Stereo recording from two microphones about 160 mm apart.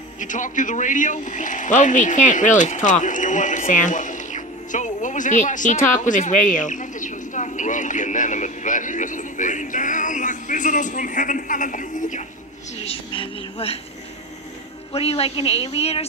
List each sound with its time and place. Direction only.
0.2 s speech: 50° left (ahead or behind)
12.8 s a sound: 35° left (ahead or behind)
14.9 s a woman's voice: 35° left (ahead or behind)